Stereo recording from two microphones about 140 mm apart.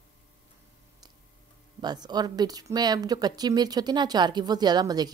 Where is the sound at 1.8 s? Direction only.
30° right (ahead or behind).